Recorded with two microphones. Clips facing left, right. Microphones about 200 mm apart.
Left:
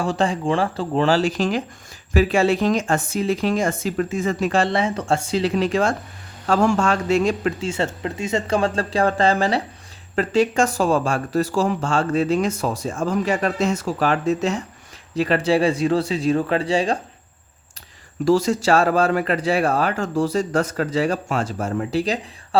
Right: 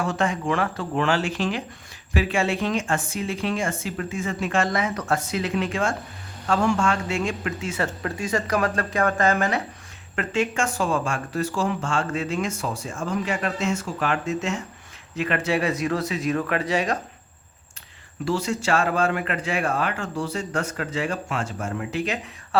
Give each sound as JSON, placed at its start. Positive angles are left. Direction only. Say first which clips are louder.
{"t": 0.0, "sound": "speech", "louder": "left 3 dB", "side_deg": 30}
{"t": 18.3, "sound": "speech", "louder": "left 7 dB", "side_deg": 40}